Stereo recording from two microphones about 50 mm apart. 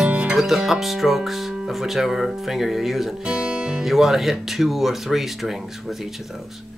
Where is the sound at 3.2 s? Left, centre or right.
Centre.